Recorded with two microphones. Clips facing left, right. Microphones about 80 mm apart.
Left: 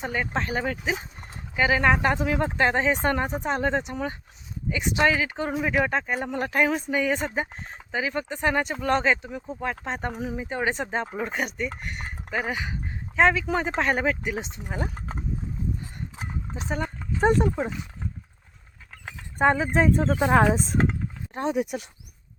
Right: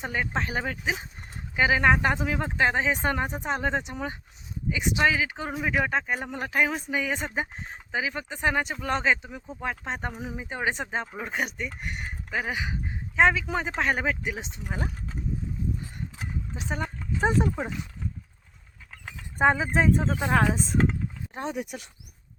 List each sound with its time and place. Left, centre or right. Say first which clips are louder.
0.0 s speech: left 1 dB; centre
14.9 s speech: left 3 dB; left
16.8 s a sound: left 4 dB; centre
19.0 s dog: left 1 dB; centre
19.5 s speech: left 1 dB; centre
20.1 s speech: left 4 dB; centre